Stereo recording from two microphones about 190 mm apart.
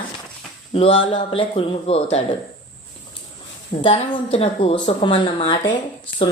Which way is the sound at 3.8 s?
30° left (ahead or behind).